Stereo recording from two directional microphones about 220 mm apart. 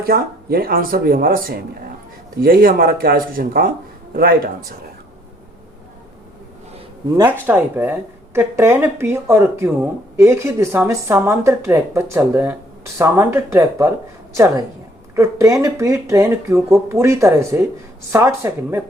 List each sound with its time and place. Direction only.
0.0 s speech: 40° right (ahead or behind)
7.2 s speech: 10° right (ahead or behind)